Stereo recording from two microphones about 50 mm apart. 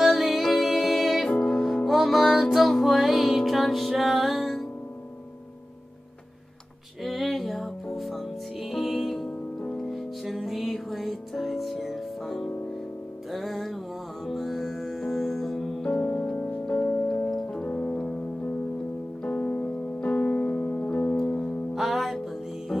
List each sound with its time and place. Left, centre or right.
0.0 s music: centre
1.3 s music: centre
1.9 s music: centre
7.0 s music: centre
15.8 s music: centre
17.3 s music: centre; by 21.2 s left
21.7 s music: centre